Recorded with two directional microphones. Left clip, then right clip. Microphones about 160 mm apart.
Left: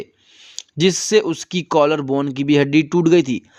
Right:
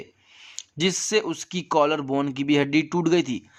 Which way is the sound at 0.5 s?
25° left (ahead or behind).